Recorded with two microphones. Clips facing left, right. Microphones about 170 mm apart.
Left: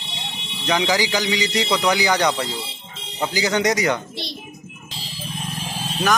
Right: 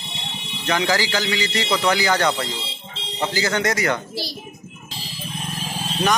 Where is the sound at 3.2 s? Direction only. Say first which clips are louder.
Left 2 dB; 15° left (ahead or behind).